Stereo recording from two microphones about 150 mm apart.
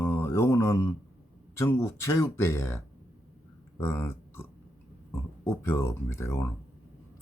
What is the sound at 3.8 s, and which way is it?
Burping, 15° left (ahead or behind).